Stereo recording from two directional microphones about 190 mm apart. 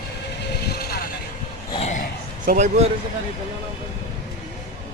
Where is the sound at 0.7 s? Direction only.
55° left (ahead or behind).